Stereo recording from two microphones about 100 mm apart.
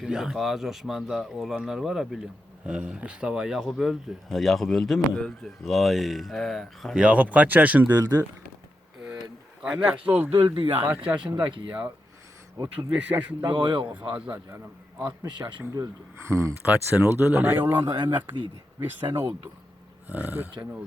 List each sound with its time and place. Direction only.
0.0 s speech: 5° right (ahead or behind)
6.9 s speech: 10° right (ahead or behind)
9.6 s speech: 10° right (ahead or behind)
10.3 s speech: 60° right (ahead or behind)
10.8 s a man's voice: 20° right (ahead or behind)
12.9 s speech: 15° right (ahead or behind)
13.4 s speech: 50° right (ahead or behind)
14.1 s speech: 15° right (ahead or behind)
15.0 s speech: 45° right (ahead or behind)
16.3 s a man's voice: 25° right (ahead or behind)
20.1 s speech: 15° right (ahead or behind)